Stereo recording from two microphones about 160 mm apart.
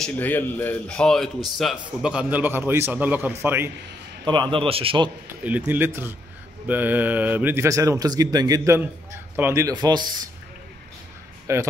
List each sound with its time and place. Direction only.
0.0 s speech: 10° left (ahead or behind); by 3.7 s 15° right (ahead or behind)
4.2 s a man's voice: 30° right (ahead or behind)
5.4 s speech: 10° right (ahead or behind); by 10.1 s 25° right (ahead or behind)
11.5 s speech: 20° right (ahead or behind)